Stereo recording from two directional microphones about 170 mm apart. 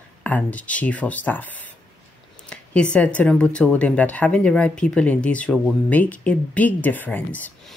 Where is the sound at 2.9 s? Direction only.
10° left (ahead or behind).